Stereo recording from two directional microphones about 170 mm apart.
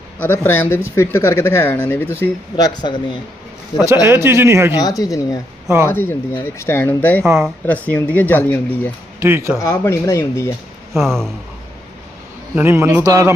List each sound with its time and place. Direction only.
0.2 s speech: 10° left (ahead or behind); by 3.2 s 25° left (ahead or behind)
4.0 s speech: 15° right (ahead or behind)
4.8 s speech: 20° left (ahead or behind)
9.2 s speech: 15° right (ahead or behind)
9.6 s speech: 15° left (ahead or behind)
10.9 s speech: centre (ahead or behind)
12.5 s speech: 15° right (ahead or behind)